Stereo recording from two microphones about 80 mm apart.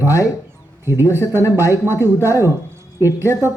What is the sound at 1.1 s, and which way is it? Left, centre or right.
Speech, right.